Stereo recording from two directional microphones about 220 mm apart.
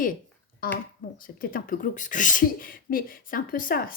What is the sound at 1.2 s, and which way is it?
Speech, 40° left (ahead or behind).